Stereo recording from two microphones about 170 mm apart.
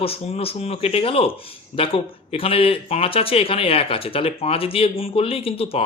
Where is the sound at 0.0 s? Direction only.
35° left (ahead or behind).